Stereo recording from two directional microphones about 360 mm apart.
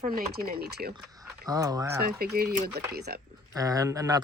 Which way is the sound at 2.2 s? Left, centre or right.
Right.